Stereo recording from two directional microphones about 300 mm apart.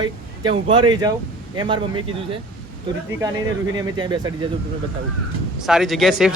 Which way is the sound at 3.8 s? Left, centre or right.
Centre.